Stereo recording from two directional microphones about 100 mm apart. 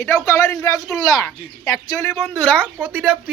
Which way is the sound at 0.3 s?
30° left (ahead or behind).